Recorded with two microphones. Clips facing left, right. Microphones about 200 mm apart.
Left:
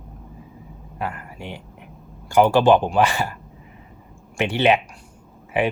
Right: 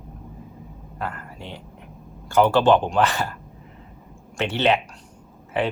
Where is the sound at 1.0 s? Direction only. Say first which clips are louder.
Left 2 dB; 10° left (ahead or behind).